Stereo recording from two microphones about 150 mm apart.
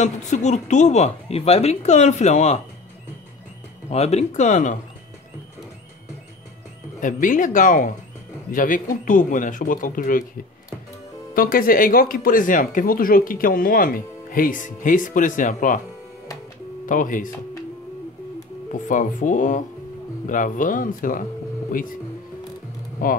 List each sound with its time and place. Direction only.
0.0 s speech: 50° left (ahead or behind)
3.9 s speech: 45° left (ahead or behind)
7.0 s speech: 60° left (ahead or behind)
11.3 s speech: 70° left (ahead or behind)
16.8 s speech: 60° left (ahead or behind)
18.7 s speech: 60° left (ahead or behind)